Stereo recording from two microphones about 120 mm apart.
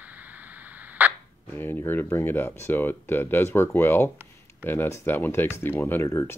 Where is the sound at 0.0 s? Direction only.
15° right (ahead or behind).